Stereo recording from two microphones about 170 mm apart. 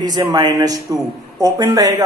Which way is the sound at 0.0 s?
25° right (ahead or behind).